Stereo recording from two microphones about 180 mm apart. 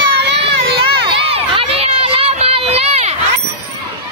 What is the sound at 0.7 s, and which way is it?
Crowd, 30° right (ahead or behind).